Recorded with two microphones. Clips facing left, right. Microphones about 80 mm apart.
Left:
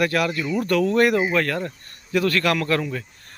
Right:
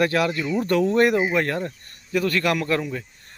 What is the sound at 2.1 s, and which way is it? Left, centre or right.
Speech, centre.